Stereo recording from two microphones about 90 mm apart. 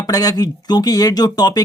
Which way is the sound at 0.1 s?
45° left (ahead or behind).